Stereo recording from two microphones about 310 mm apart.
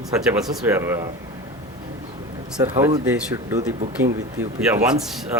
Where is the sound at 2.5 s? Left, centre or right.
Centre.